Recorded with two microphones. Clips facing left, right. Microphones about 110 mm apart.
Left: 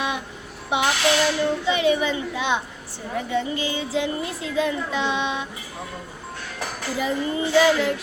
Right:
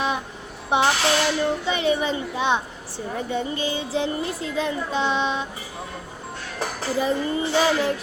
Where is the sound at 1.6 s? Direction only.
35° right (ahead or behind).